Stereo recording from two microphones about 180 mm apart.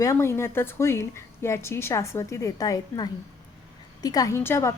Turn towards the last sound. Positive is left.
turn(degrees=15)  # may be behind; listen again after turning